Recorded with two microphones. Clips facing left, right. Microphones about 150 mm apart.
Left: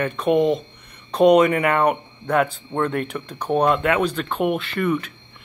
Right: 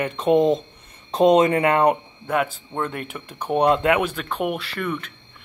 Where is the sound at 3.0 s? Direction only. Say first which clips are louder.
Left 5 dB; 10° right (ahead or behind).